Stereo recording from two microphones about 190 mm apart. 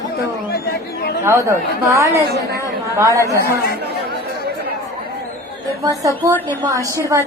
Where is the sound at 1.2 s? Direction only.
15° right (ahead or behind).